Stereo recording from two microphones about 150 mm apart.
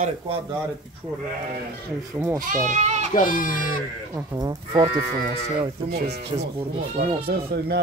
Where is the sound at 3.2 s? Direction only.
60° left (ahead or behind).